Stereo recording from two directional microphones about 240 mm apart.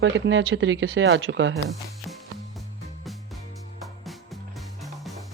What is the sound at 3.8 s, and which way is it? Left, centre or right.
Music, centre.